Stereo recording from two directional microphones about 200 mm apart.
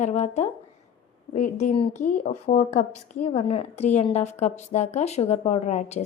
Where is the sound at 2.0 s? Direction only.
40° left (ahead or behind).